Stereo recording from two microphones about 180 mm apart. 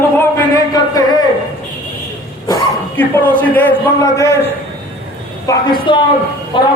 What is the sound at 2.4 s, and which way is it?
A man's voice, 15° left (ahead or behind).